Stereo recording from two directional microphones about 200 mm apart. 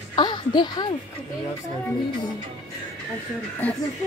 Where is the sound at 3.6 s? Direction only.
5° left (ahead or behind).